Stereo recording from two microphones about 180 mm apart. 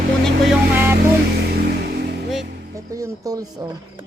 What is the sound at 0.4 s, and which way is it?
Vehicle, 10° right (ahead or behind).